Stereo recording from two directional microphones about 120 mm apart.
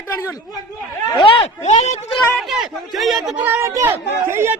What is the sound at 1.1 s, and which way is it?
Speech, 45° left (ahead or behind).